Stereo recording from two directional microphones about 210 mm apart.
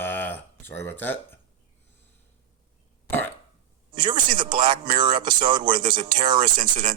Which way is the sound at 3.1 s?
10° left (ahead or behind).